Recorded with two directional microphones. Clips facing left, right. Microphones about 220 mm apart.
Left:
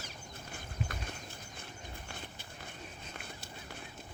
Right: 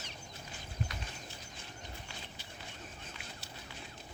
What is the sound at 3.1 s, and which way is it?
Fowl, 55° left (ahead or behind).